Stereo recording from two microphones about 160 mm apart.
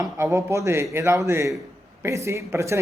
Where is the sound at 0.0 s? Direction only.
20° right (ahead or behind).